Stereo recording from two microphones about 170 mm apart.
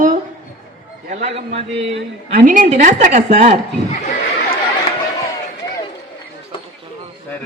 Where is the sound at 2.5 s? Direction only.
50° right (ahead or behind).